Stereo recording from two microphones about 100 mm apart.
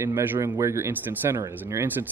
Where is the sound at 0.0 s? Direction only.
20° right (ahead or behind).